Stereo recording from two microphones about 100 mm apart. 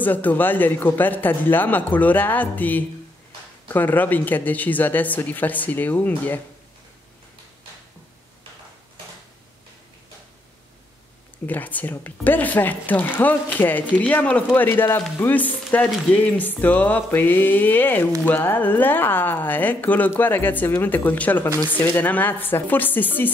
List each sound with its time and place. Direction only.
0.0 s speech: 20° left (ahead or behind)
11.4 s speech: 15° left (ahead or behind)